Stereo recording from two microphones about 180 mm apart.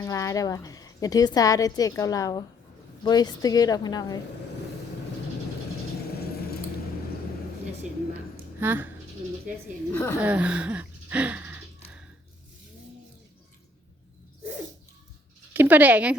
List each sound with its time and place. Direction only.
0.0 s a woman's voice: 15° left (ahead or behind)
8.6 s speech: 10° right (ahead or behind)
9.9 s speech: 15° left (ahead or behind)
10.2 s speech: 10° right (ahead or behind)
15.5 s speech: 10° right (ahead or behind)